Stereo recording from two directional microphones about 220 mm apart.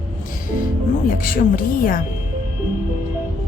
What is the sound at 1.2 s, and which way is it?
Speech, 40° left (ahead or behind).